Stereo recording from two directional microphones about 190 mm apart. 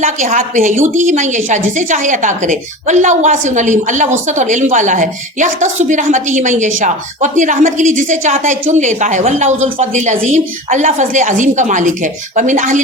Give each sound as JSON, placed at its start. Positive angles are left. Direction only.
{"t": 0.0, "sound": "a woman's voice", "side_deg": -45}